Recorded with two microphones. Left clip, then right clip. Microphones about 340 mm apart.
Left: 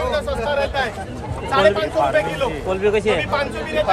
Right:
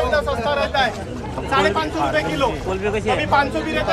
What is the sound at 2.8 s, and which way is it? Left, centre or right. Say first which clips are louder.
Speech: left 4 dB; left.